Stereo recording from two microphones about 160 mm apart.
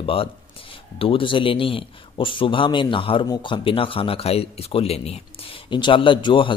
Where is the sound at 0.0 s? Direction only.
35° left (ahead or behind).